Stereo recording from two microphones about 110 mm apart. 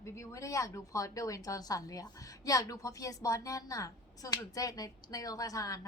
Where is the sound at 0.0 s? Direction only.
30° left (ahead or behind).